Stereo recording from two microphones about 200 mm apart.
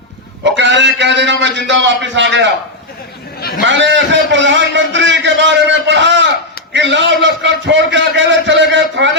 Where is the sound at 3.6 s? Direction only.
65° right (ahead or behind).